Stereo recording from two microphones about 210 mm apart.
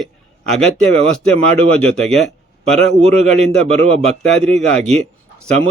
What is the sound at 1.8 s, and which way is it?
Speech, centre (ahead or behind).